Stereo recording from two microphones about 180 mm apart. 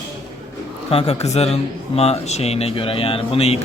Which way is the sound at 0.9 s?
35° left (ahead or behind).